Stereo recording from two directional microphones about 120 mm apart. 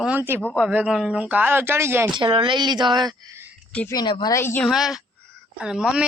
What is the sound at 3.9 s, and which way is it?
Speech, 35° left (ahead or behind).